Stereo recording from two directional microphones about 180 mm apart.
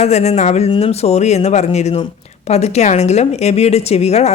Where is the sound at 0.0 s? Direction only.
35° left (ahead or behind).